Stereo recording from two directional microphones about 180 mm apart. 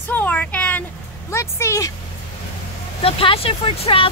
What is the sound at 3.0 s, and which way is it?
Speech, 30° left (ahead or behind).